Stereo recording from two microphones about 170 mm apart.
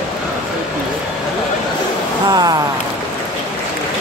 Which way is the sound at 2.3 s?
25° right (ahead or behind).